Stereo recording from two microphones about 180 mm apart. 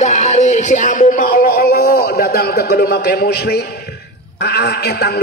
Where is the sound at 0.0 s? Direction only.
40° left (ahead or behind).